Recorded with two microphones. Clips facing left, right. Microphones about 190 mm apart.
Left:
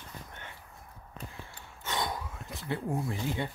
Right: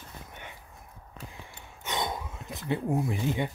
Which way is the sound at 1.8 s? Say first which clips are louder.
Right 2 dB; 20° right (ahead or behind).